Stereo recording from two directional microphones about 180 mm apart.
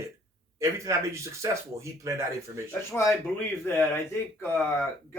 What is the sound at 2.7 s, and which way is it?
Speech, 15° left (ahead or behind).